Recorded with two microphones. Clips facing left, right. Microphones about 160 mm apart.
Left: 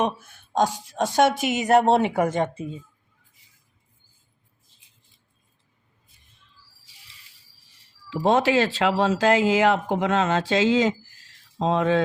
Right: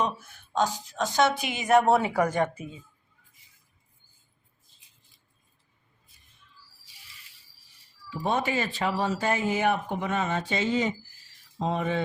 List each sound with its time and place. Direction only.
0.5 s speech: 45° left (ahead or behind); by 2.6 s 25° left (ahead or behind)
8.1 s speech: 90° left